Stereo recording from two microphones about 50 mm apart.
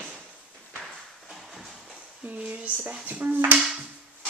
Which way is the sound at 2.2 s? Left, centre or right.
Right.